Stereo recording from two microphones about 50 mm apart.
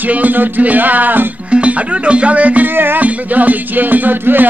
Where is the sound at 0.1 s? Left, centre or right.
Right.